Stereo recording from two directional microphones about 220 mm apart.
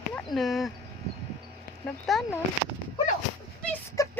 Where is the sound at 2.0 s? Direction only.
Centre (ahead or behind).